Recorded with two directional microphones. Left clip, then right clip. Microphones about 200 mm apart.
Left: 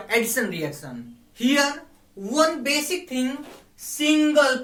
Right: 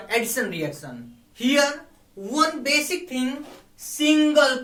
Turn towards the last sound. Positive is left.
turn(degrees=5)  # may be behind; listen again after turning